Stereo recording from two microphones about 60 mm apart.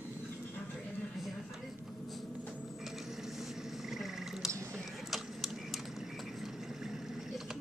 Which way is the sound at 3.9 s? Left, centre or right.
Centre.